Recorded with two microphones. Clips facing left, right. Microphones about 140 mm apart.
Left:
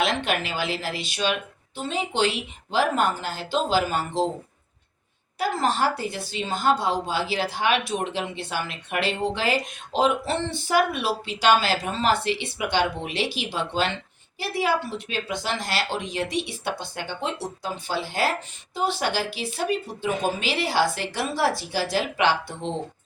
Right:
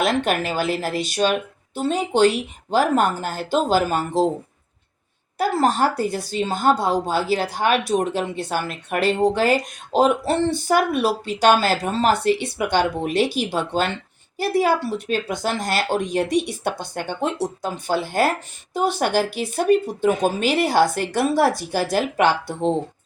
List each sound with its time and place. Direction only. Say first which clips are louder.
0.0 s speech: right 4 dB; 45° right (ahead or behind)
5.4 s speech: right 5 dB; 45° right (ahead or behind)